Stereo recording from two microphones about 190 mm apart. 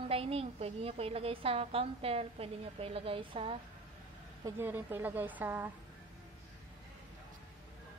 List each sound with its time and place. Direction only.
0.1 s a woman's voice: 30° right (ahead or behind)
4.6 s a woman's voice: 10° right (ahead or behind)